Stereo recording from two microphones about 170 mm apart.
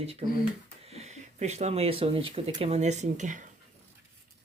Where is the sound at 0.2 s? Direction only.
30° right (ahead or behind).